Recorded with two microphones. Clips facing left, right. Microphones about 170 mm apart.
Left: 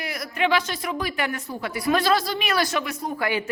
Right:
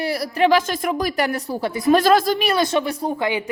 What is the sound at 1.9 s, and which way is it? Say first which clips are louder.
Speech: right 7 dB; 50° right (ahead or behind).